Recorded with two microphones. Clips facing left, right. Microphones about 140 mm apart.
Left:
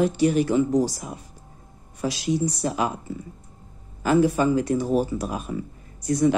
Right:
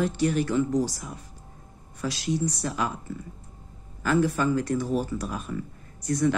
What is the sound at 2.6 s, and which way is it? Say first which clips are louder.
Speech: left 6 dB; 15° left (ahead or behind).